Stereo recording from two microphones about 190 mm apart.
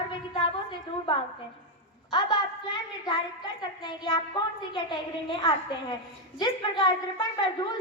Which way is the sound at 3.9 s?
25° left (ahead or behind).